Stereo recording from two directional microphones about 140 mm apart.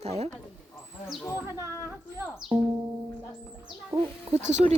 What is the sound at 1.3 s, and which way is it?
Speech, 15° right (ahead or behind).